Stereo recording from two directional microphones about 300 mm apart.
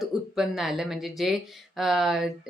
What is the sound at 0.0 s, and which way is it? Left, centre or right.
Speech, centre.